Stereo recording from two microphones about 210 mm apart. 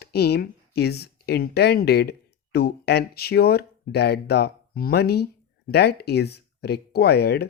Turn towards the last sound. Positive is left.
turn(degrees=50)  # may be behind; listen again after turning